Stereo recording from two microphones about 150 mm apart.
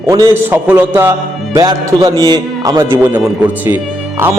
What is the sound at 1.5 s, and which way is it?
A man's voice, 25° right (ahead or behind).